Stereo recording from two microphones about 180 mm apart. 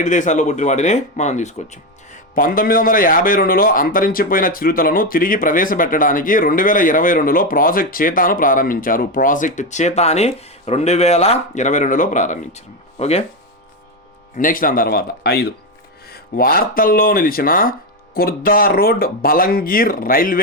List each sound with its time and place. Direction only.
0.0 s speech: 45° left (ahead or behind)
14.3 s speech: 50° left (ahead or behind)